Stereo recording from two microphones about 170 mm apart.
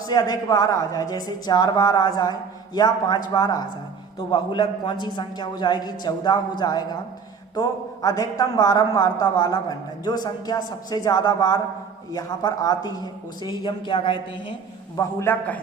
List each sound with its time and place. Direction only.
0.1 s a man's voice: 25° left (ahead or behind)
14.9 s a man's voice: 15° left (ahead or behind)